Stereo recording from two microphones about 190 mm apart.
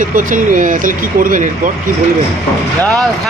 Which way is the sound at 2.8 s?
5° left (ahead or behind).